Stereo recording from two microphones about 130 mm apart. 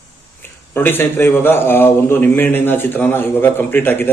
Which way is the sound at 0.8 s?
15° left (ahead or behind).